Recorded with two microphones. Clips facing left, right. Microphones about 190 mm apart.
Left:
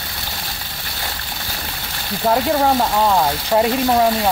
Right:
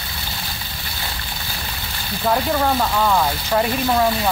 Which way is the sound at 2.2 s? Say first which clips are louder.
Left 3 dB; 25° left (ahead or behind).